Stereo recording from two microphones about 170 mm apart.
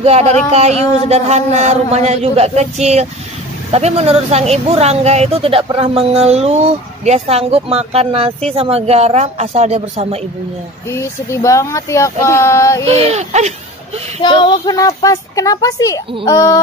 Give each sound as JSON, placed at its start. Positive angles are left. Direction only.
{"t": 0.0, "sound": "speech", "side_deg": -40}
{"t": 10.9, "sound": "speech", "side_deg": 15}
{"t": 12.8, "sound": "speech", "side_deg": -40}
{"t": 14.2, "sound": "a woman's voice", "side_deg": 25}